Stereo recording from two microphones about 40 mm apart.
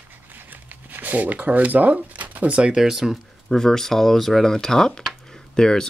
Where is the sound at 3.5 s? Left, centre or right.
Centre.